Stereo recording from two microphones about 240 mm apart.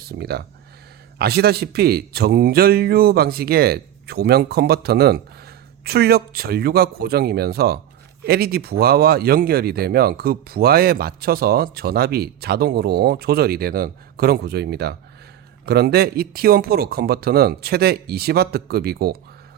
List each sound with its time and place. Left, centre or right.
0.0 s speech: right